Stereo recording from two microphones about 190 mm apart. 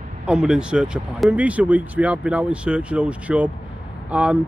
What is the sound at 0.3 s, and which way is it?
A man's voice, 5° right (ahead or behind).